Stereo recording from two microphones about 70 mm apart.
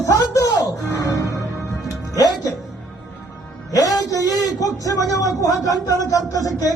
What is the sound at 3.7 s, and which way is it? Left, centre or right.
A man's voice, left.